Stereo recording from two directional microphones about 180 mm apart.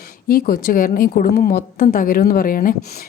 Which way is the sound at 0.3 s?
55° left (ahead or behind).